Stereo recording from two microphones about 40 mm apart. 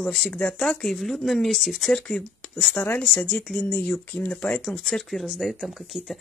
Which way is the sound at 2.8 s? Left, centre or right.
Left.